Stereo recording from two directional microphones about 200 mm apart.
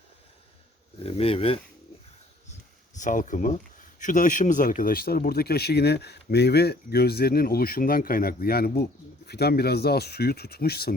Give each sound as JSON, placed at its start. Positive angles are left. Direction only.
{"t": 1.0, "sound": "speech", "side_deg": 30}
{"t": 3.0, "sound": "speech", "side_deg": 40}